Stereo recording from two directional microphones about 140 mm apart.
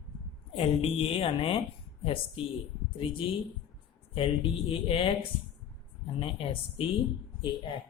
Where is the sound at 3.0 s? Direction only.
40° left (ahead or behind).